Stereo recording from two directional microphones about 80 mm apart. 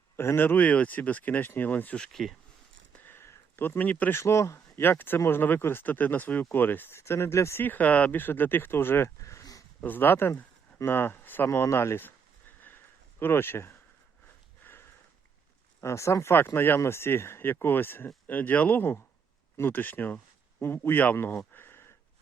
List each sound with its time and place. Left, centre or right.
0.2 s speech: left
2.9 s a sound: left
4.1 s speech: left
4.8 s speech: left
7.6 s speech: left
9.8 s speech: left
12.6 s a sound: left
15.8 s speech: left